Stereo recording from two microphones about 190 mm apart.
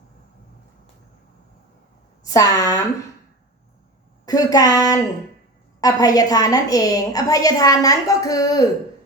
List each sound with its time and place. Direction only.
2.2 s speech: 15° left (ahead or behind)
4.3 s a woman's voice: 20° left (ahead or behind)